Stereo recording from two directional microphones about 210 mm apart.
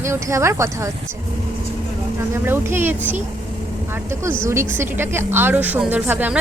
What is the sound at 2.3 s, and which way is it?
A woman's voice, 10° right (ahead or behind).